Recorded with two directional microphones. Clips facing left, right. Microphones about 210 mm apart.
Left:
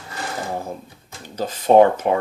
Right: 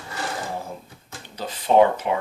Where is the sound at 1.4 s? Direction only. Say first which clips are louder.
Left 4 dB; 45° left (ahead or behind).